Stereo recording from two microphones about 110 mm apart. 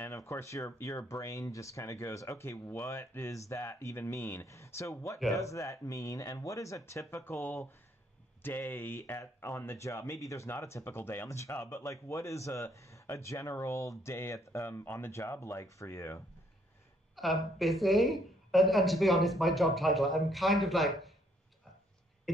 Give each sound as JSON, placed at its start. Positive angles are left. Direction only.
{"t": 0.0, "sound": "a sound", "side_deg": 25}
{"t": 0.7, "sound": "speech", "side_deg": 25}
{"t": 17.1, "sound": "speech", "side_deg": 0}